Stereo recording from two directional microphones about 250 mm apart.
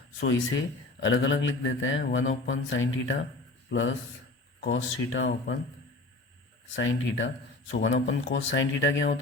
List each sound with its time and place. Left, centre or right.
0.9 s speech: left
6.7 s speech: left